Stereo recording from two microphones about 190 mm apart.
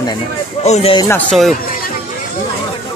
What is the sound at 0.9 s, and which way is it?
Speech, 10° left (ahead or behind).